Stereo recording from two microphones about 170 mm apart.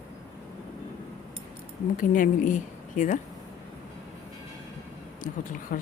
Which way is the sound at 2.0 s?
50° left (ahead or behind).